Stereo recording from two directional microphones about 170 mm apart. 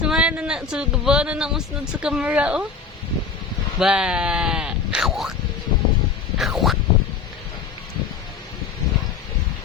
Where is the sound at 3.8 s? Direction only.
5° right (ahead or behind).